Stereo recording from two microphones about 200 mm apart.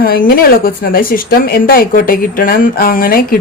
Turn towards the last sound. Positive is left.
turn(degrees=45)  # may be behind; listen again after turning